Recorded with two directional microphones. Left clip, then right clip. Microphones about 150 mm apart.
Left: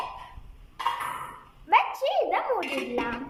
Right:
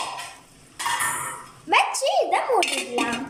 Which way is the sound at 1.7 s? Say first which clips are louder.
Right 3 dB; 15° right (ahead or behind).